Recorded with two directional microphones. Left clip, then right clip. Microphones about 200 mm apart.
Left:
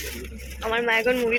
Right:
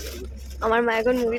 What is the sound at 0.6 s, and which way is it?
Speech, 30° right (ahead or behind).